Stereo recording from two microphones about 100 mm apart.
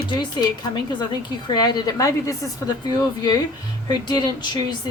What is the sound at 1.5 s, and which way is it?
A woman's voice, 45° left (ahead or behind).